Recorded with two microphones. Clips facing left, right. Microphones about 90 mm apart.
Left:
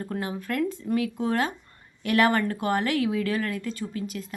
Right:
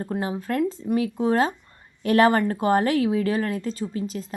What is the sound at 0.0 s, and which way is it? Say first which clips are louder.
Speech: right 4 dB; 25° right (ahead or behind).